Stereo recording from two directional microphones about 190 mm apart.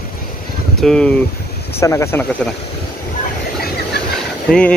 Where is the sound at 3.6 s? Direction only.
55° left (ahead or behind).